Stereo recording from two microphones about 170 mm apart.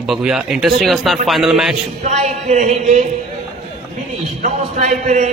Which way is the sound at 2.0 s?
40° right (ahead or behind).